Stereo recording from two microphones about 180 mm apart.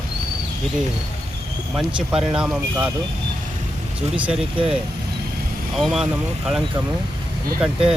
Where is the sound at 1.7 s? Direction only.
5° right (ahead or behind).